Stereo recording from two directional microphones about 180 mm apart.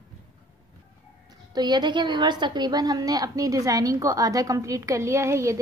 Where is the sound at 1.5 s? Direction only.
25° right (ahead or behind).